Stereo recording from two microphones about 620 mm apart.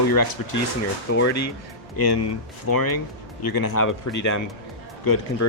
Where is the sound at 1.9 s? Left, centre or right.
Left.